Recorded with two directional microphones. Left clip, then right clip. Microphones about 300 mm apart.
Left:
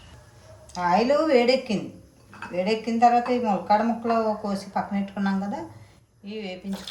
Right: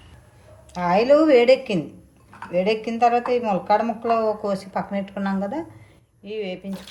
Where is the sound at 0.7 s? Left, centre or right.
Right.